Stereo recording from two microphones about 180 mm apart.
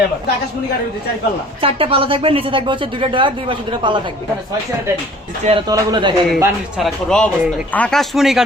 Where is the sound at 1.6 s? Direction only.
30° right (ahead or behind).